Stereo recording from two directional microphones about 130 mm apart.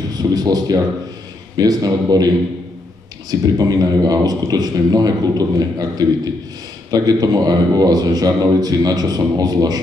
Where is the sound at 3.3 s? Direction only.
30° right (ahead or behind).